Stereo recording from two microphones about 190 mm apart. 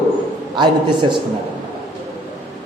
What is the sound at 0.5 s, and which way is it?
Speech, 25° right (ahead or behind).